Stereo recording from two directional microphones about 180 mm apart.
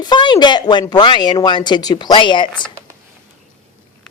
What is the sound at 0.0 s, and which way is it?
A woman's voice, 25° left (ahead or behind).